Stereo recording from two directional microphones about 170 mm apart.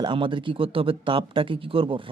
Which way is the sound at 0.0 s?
30° right (ahead or behind).